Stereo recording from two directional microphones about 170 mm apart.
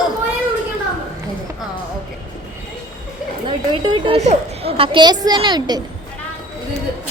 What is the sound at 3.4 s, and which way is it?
A woman's voice, 30° right (ahead or behind).